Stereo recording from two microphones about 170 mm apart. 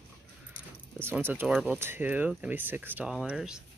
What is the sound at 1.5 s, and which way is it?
Speech, 5° right (ahead or behind).